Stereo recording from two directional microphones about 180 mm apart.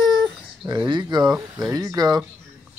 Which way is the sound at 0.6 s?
25° right (ahead or behind).